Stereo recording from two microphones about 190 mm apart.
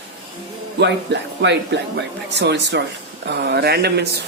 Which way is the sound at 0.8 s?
65° right (ahead or behind).